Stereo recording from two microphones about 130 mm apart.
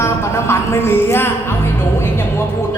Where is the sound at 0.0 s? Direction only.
20° left (ahead or behind).